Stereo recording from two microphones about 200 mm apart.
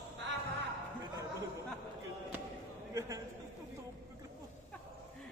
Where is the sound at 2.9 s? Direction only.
15° right (ahead or behind).